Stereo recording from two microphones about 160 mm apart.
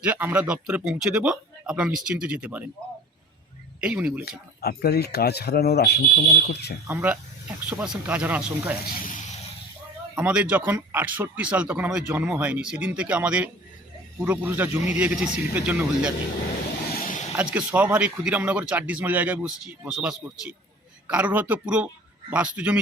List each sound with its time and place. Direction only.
0.0 s speech: 10° right (ahead or behind)
3.8 s speech: 5° right (ahead or behind)
4.6 s speech: 70° left (ahead or behind); by 6.7 s 90° left
6.8 s speech: 10° right (ahead or behind)
9.0 s a sound: 55° left (ahead or behind)
10.2 s speech: 10° right (ahead or behind)
16.9 s vehicle: 60° left (ahead or behind)
17.3 s speech: 10° right (ahead or behind)